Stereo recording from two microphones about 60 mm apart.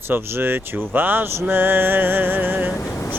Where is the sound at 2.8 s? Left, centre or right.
Left.